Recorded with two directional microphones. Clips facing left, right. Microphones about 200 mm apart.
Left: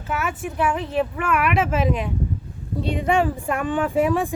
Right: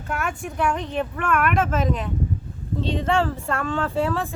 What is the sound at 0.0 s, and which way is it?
Speech, 5° left (ahead or behind).